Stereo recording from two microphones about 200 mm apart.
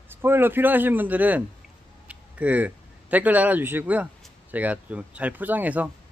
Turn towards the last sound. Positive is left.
turn(degrees=-10)  # may be behind; listen again after turning